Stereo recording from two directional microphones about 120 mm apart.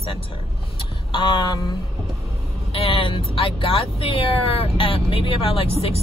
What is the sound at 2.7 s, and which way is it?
Speech, 50° left (ahead or behind).